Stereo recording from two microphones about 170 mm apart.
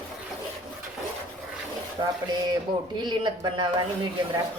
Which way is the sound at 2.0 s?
25° right (ahead or behind).